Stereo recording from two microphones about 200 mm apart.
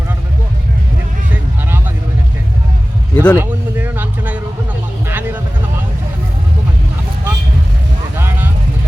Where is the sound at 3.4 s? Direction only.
10° right (ahead or behind).